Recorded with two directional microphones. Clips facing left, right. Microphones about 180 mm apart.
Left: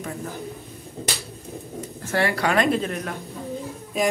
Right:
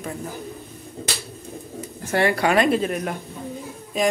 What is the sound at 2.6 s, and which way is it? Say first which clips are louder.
Speech: right 1 dB; 5° right (ahead or behind).